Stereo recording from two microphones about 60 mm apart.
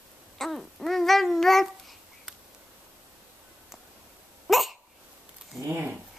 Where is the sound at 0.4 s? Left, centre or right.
Centre.